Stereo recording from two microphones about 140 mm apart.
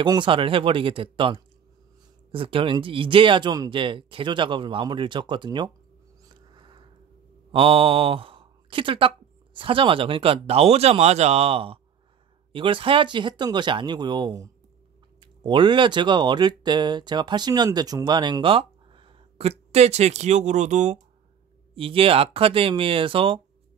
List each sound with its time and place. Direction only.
0.0 s speech: 35° right (ahead or behind)
6.2 s a sound: 35° right (ahead or behind)
7.5 s speech: 40° right (ahead or behind); by 21.0 s 60° right (ahead or behind)
21.7 s speech: 40° right (ahead or behind)